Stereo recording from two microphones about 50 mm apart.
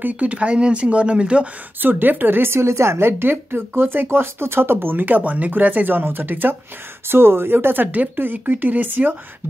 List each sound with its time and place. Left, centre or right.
0.0 s speech: right
1.8 s speech: right
2.5 s speech: right
7.1 s speech: right